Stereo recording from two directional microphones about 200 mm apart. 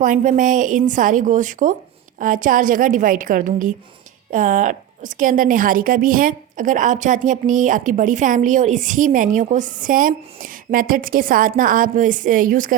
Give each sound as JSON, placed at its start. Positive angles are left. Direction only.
{"t": 0.0, "sound": "a woman's voice", "side_deg": -40}